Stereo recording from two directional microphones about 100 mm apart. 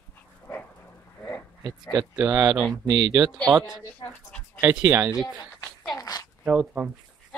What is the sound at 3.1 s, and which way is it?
Speech, 40° right (ahead or behind).